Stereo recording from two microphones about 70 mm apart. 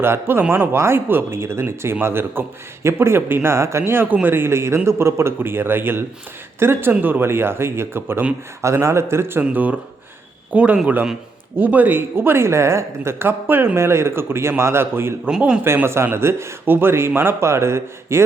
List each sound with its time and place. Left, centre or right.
0.0 s speech: right
9.4 s speech: right
15.4 s speech: centre
15.6 s speech: right